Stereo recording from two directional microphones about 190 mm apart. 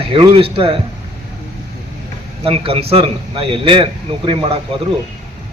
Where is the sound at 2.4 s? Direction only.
30° right (ahead or behind).